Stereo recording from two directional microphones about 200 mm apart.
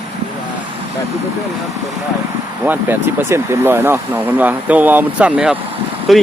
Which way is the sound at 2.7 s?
10° right (ahead or behind).